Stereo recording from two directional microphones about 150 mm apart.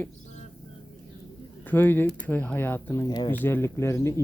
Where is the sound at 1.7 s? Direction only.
15° left (ahead or behind).